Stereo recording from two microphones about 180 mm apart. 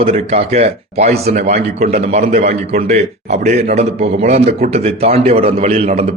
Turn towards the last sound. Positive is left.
turn(degrees=-35)  # may be behind; listen again after turning